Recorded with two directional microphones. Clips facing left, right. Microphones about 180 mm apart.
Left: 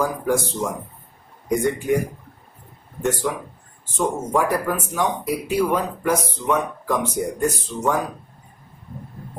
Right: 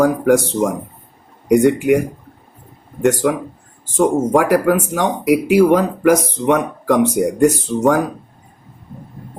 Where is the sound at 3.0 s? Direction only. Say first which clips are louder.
Right 8 dB; 80° right.